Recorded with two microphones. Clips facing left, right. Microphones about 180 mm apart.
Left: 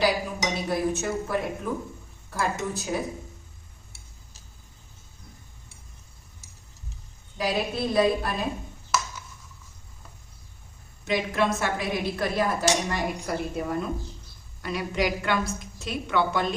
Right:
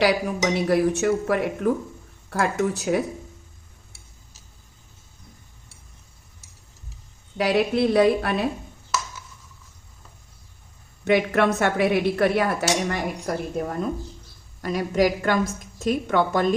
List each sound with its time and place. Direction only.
0.0 s speech: 70° right (ahead or behind)
7.3 s speech: 75° right (ahead or behind)
11.0 s speech: 60° right (ahead or behind)
12.9 s a woman's voice: 45° right (ahead or behind)